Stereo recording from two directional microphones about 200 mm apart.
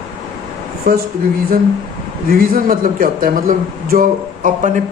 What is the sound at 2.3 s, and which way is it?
A man's voice, 45° right (ahead or behind).